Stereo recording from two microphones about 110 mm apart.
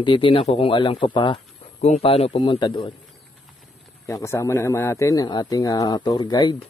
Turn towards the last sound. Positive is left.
turn(degrees=40)  # may be behind; listen again after turning